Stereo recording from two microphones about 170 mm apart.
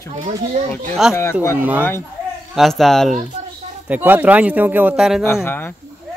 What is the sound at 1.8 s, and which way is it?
Speech, 15° left (ahead or behind).